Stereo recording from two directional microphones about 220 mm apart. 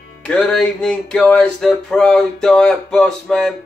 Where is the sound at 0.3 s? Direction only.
Centre (ahead or behind).